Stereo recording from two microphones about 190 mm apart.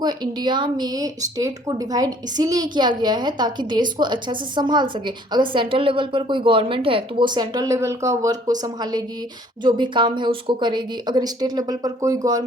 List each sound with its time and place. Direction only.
0.0 s speech: 20° right (ahead or behind)